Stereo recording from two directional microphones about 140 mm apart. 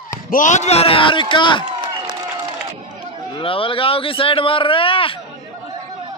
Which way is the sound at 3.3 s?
40° left (ahead or behind).